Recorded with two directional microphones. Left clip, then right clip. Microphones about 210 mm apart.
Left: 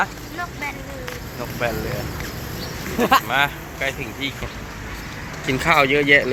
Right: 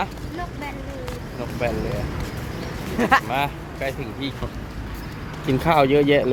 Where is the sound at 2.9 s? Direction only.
50° left (ahead or behind).